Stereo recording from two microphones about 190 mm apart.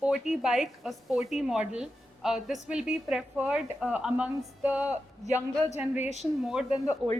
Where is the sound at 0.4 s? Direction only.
Centre (ahead or behind).